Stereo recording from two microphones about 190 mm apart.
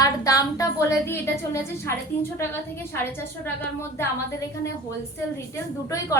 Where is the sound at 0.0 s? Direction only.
20° left (ahead or behind).